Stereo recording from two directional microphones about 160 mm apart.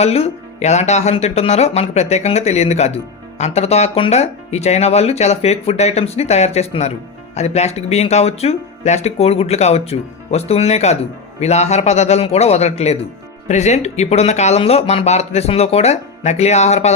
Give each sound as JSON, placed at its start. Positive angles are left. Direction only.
{"t": 0.0, "sound": "speech", "side_deg": 40}